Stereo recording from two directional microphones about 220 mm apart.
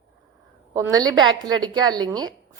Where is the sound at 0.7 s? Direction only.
15° right (ahead or behind).